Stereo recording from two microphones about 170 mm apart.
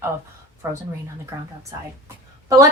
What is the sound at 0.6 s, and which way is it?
Speech, 15° right (ahead or behind).